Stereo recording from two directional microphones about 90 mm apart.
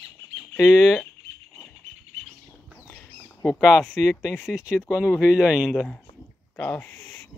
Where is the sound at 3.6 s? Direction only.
5° right (ahead or behind).